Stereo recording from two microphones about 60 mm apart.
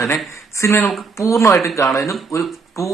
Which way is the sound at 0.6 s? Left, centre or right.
Left.